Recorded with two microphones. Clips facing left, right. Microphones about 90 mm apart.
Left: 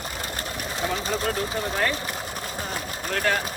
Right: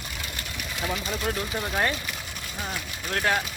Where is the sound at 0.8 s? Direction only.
35° left (ahead or behind).